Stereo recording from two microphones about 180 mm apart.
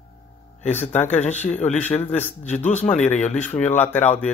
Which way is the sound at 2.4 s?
40° left (ahead or behind).